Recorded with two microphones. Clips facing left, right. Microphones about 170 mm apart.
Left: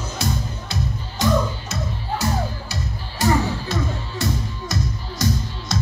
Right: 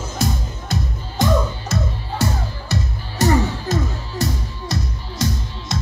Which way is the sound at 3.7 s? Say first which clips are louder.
Right 5 dB; 45° right (ahead or behind).